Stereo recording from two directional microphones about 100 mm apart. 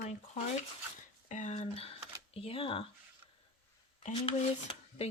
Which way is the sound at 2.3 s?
65° left (ahead or behind).